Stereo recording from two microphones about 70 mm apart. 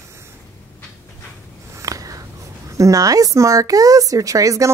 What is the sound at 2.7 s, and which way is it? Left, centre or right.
A woman's voice, right.